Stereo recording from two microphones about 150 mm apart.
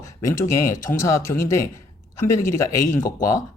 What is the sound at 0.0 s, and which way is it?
Speech, 20° left (ahead or behind).